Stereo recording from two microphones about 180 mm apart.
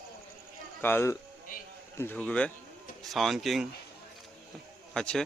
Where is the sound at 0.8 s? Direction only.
15° left (ahead or behind).